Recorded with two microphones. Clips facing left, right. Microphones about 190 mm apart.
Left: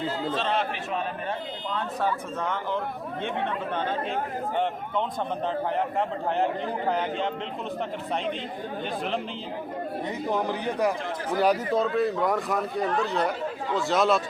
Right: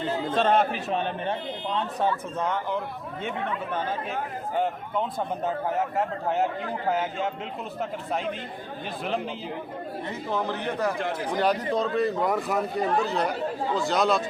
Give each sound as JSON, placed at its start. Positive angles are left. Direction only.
{"t": 0.3, "sound": "speech", "side_deg": -50}
{"t": 2.4, "sound": "speech", "side_deg": -15}
{"t": 4.5, "sound": "a man's voice", "side_deg": -5}
{"t": 10.2, "sound": "a man's voice", "side_deg": 15}